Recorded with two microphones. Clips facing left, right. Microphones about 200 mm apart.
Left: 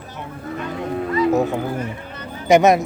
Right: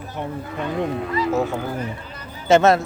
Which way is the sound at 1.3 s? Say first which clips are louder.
Left 3 dB; 20° left (ahead or behind).